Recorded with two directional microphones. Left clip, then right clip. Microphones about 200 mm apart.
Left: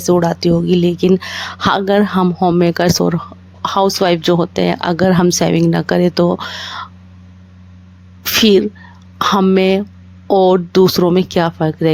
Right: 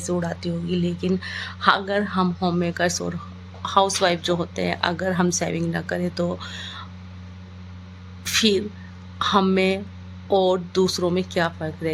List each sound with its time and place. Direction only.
0.1 s speech: 50° left (ahead or behind)
8.2 s speech: 45° left (ahead or behind)